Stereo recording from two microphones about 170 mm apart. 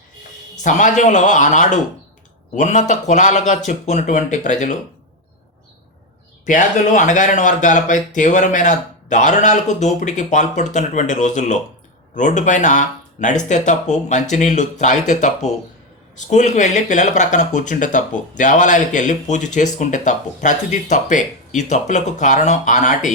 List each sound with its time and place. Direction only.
0.6 s speech: 45° left (ahead or behind)
6.4 s speech: 50° left (ahead or behind)